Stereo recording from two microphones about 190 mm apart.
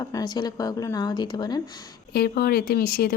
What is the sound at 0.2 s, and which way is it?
Speech, 20° left (ahead or behind).